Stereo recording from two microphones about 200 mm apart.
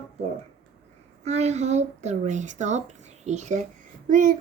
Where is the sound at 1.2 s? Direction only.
35° right (ahead or behind).